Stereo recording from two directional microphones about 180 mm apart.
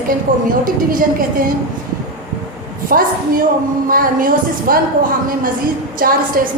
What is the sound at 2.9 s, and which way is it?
A woman's voice, 50° right (ahead or behind).